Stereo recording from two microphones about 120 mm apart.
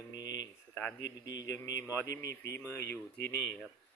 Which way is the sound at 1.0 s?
30° left (ahead or behind).